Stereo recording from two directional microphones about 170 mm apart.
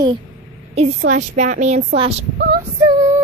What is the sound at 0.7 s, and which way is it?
A woman's voice, 40° right (ahead or behind).